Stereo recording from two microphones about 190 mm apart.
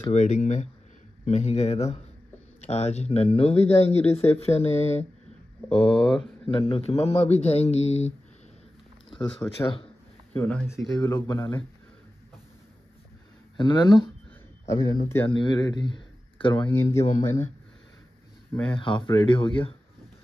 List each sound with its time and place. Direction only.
0.1 s speech: 40° left (ahead or behind)
5.8 s speech: 5° left (ahead or behind)
6.4 s speech: 30° left (ahead or behind)
9.4 s speech: 10° left (ahead or behind)
10.7 s speech: centre (ahead or behind)
11.0 s speech: 20° left (ahead or behind)
13.6 s speech: 25° left (ahead or behind)
16.6 s speech: 10° left (ahead or behind)
18.5 s speech: 5° left (ahead or behind)
18.8 s speech: 25° left (ahead or behind)